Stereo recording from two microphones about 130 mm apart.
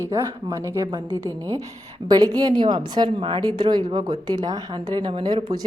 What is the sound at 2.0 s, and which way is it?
A woman's voice, 30° right (ahead or behind).